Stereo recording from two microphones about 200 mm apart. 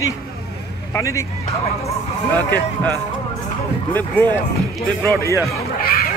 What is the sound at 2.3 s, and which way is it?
Speech, 10° left (ahead or behind).